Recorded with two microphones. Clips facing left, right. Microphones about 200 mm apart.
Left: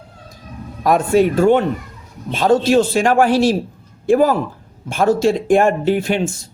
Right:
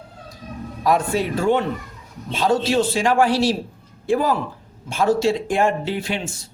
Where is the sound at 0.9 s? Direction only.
50° left (ahead or behind).